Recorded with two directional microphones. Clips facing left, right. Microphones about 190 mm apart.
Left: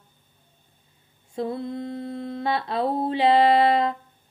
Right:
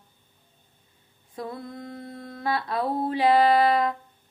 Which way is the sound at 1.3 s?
25° left (ahead or behind).